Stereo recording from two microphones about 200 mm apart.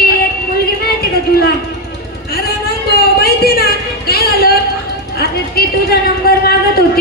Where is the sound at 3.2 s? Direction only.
50° left (ahead or behind).